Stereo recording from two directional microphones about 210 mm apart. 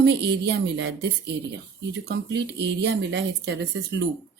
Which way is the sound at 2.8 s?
55° right (ahead or behind).